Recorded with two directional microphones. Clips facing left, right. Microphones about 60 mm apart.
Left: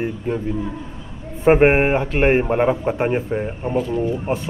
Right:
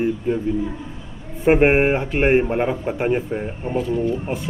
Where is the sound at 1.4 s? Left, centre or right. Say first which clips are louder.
Left 1 dB; left.